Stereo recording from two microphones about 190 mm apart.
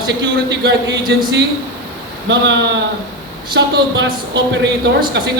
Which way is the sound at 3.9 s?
70° right (ahead or behind).